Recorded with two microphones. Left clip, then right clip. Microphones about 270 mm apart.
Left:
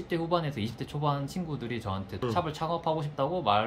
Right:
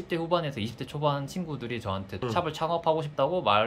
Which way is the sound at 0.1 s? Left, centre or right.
Centre.